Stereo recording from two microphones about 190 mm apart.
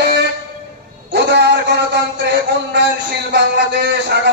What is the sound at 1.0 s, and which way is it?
A man's voice, 65° right (ahead or behind).